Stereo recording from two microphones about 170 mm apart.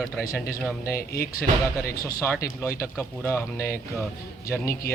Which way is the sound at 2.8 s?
15° left (ahead or behind).